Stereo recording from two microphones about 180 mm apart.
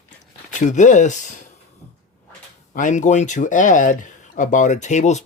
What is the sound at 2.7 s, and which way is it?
Speech, 45° left (ahead or behind).